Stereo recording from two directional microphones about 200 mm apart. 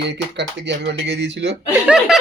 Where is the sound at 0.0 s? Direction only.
60° right (ahead or behind).